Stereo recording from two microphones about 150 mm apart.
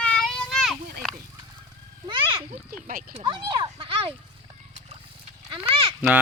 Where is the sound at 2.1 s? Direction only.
35° right (ahead or behind).